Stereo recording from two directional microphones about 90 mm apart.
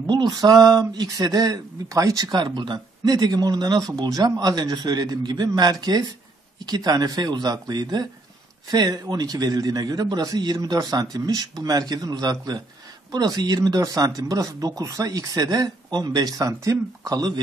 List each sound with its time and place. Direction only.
0.0 s speech: 50° right (ahead or behind)